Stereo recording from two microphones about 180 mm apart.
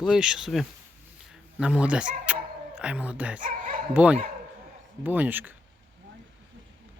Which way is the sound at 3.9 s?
10° right (ahead or behind).